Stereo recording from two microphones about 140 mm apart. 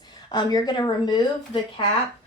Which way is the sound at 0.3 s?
30° left (ahead or behind).